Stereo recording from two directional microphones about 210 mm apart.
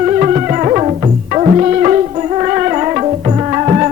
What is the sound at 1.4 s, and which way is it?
Music, 30° right (ahead or behind).